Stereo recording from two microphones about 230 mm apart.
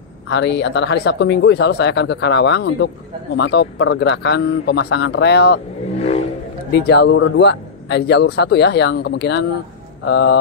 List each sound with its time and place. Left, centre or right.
0.3 s speech: left
6.7 s speech: left